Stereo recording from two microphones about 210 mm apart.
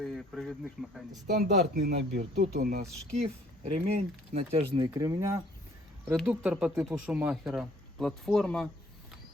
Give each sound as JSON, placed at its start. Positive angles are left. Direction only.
{"t": 0.0, "sound": "speech", "side_deg": 0}
{"t": 1.3, "sound": "speech", "side_deg": -45}
{"t": 3.1, "sound": "speech", "side_deg": -30}
{"t": 6.1, "sound": "speech", "side_deg": -5}